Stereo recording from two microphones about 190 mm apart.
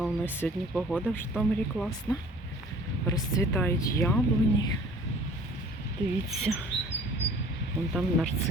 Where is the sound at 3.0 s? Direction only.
15° left (ahead or behind).